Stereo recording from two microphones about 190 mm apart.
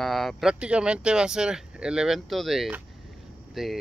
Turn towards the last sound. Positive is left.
turn(degrees=0)  # may be behind; listen again after turning